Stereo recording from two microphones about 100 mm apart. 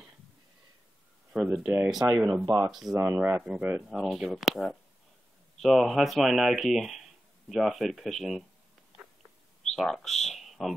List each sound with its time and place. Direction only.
1.3 s speech: 5° right (ahead or behind)
2.0 s speech: 30° right (ahead or behind)
3.0 s speech: 20° right (ahead or behind)
3.4 s speech: 5° right (ahead or behind)
9.8 s speech: centre (ahead or behind)